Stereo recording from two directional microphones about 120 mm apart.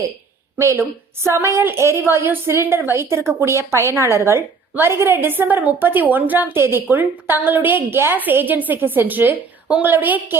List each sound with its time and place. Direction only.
0.6 s a woman's voice: 25° right (ahead or behind)